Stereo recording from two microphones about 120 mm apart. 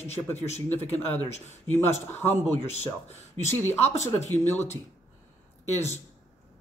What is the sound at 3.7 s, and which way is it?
Speech, 65° left (ahead or behind).